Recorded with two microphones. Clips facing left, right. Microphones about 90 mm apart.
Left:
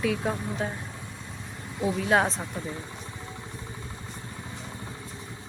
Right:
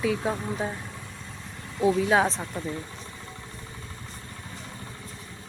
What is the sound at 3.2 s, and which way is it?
Vehicle, 15° left (ahead or behind).